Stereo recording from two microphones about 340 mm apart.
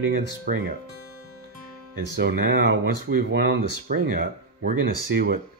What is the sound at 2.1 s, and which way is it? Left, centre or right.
Speech, right.